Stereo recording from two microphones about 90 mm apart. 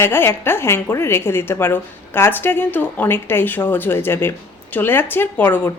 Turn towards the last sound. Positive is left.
turn(degrees=25)  # may be behind; listen again after turning